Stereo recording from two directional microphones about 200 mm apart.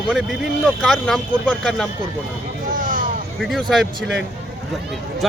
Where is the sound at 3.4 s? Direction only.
Centre (ahead or behind).